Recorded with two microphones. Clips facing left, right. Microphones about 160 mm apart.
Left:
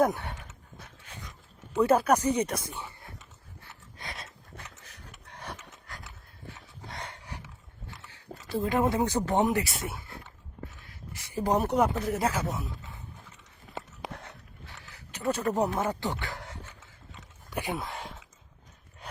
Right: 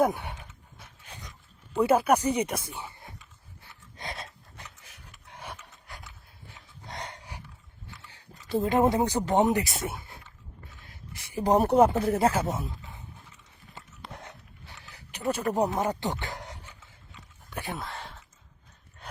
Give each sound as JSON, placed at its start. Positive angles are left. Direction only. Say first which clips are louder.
{"t": 0.0, "sound": "speech", "louder": "even", "side_deg": -10}
{"t": 0.8, "sound": "dog", "louder": "even", "side_deg": -20}
{"t": 1.7, "sound": "speech", "louder": "right 1 dB", "side_deg": -10}
{"t": 3.9, "sound": "dog", "louder": "right 4 dB", "side_deg": -20}
{"t": 6.8, "sound": "dog", "louder": "right 2 dB", "side_deg": -20}
{"t": 8.4, "sound": "speech", "louder": "right 3 dB", "side_deg": -20}
{"t": 11.6, "sound": "speech", "louder": "right 5 dB", "side_deg": -30}
{"t": 15.1, "sound": "speech", "louder": "even", "side_deg": -10}
{"t": 17.5, "sound": "a sound", "louder": "left 3 dB", "side_deg": 15}